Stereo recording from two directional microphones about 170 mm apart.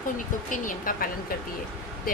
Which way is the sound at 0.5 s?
50° left (ahead or behind).